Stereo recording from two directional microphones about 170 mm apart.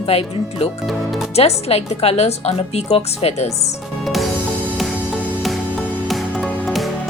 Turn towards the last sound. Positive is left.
turn(degrees=0)  # may be behind; listen again after turning